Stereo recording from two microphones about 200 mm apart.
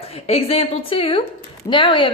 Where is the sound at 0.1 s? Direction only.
30° left (ahead or behind).